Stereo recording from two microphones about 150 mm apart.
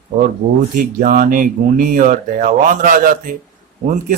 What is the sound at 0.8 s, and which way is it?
Speech, 65° right (ahead or behind).